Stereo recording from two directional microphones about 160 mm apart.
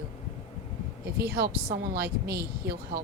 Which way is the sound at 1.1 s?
80° right.